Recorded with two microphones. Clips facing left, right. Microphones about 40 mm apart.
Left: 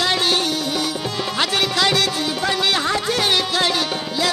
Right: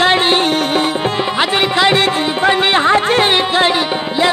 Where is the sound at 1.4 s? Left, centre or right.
Right.